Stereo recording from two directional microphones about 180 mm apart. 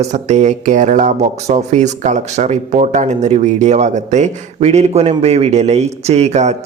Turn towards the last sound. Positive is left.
turn(degrees=-40)  # may be behind; listen again after turning